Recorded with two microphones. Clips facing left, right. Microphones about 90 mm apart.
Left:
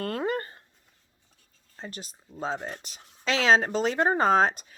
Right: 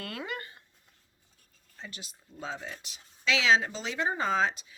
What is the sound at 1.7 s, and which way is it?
Speech, 40° left (ahead or behind).